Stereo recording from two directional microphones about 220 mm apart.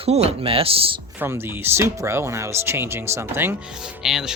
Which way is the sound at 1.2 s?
10° right (ahead or behind).